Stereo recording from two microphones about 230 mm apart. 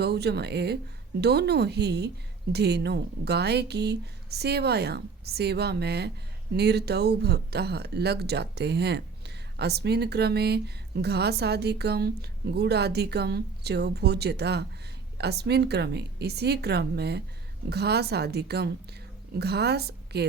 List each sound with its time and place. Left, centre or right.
0.0 s speech: right